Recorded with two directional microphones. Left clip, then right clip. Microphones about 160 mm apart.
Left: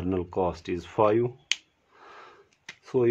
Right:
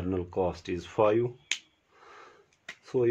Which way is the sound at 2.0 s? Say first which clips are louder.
Left 3 dB; 25° left (ahead or behind).